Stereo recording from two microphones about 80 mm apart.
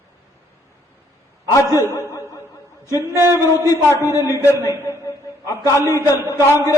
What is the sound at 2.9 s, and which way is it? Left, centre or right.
A man's voice, left.